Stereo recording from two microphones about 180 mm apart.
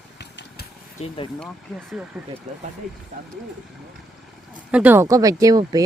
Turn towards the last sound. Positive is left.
turn(degrees=-20)  # may be behind; listen again after turning